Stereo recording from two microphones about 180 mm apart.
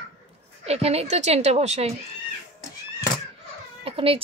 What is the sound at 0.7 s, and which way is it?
A woman's voice, 35° right (ahead or behind).